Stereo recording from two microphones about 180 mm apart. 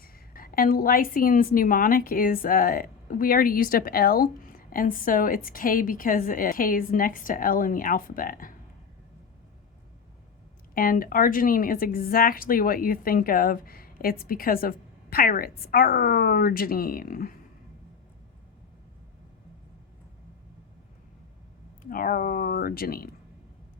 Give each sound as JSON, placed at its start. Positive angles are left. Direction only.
{"t": 0.0, "sound": "a woman's voice", "side_deg": 55}
{"t": 10.8, "sound": "a woman's voice", "side_deg": 50}
{"t": 21.8, "sound": "a woman's voice", "side_deg": 50}